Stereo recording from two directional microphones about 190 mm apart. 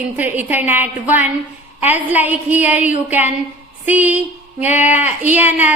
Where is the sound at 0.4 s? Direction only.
10° right (ahead or behind).